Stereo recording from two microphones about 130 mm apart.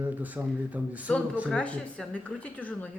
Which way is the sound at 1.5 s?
10° left (ahead or behind).